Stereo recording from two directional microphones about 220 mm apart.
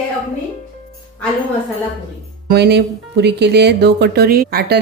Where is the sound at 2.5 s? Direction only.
50° right (ahead or behind).